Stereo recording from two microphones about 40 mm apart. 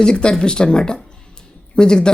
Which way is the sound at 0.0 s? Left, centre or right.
Left.